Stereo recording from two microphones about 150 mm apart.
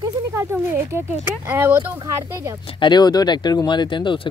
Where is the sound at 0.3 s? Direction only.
15° right (ahead or behind).